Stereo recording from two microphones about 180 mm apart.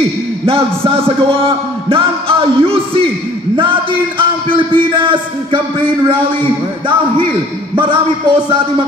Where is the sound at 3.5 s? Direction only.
30° right (ahead or behind).